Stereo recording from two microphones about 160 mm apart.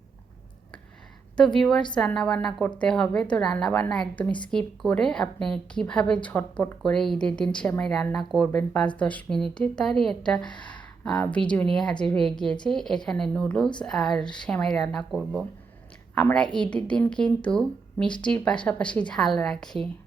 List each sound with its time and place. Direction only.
1.4 s a woman's voice: 5° left (ahead or behind)
10.5 s speech: 30° left (ahead or behind)
10.8 s a woman's voice: 5° left (ahead or behind)